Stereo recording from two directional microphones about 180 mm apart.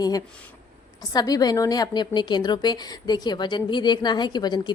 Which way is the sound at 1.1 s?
20° left (ahead or behind).